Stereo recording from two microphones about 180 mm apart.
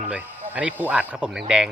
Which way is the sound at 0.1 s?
10° right (ahead or behind).